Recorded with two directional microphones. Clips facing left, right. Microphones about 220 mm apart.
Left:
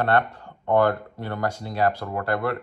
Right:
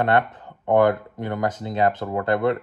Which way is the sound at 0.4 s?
20° right (ahead or behind).